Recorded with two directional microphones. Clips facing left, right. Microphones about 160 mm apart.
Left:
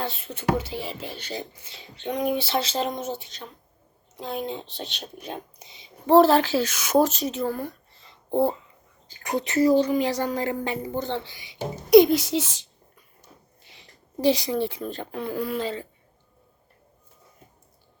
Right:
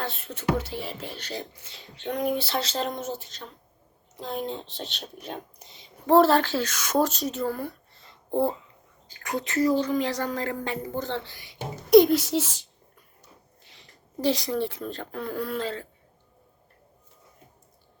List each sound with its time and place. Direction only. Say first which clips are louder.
0.0 s speech: left 2 dB; centre (ahead or behind)
9.2 s speech: left 3 dB; 20° left (ahead or behind)
9.8 s a woman's voice: left 3 dB; 10° left (ahead or behind)
11.0 s speech: left 2 dB; centre (ahead or behind)
13.7 s speech: left 4 dB; 5° left (ahead or behind)